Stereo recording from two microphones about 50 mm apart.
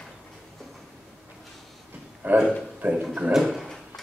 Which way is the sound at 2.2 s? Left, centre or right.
Right.